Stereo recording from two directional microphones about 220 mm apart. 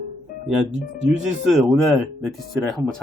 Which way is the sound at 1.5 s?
Centre (ahead or behind).